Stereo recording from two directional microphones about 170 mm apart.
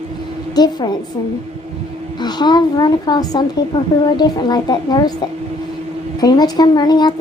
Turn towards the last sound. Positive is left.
turn(degrees=25)  # may be behind; listen again after turning